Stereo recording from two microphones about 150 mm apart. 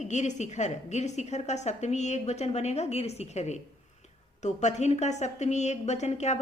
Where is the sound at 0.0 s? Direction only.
50° left (ahead or behind).